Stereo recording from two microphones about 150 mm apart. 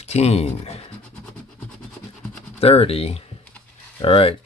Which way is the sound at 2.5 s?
40° left (ahead or behind).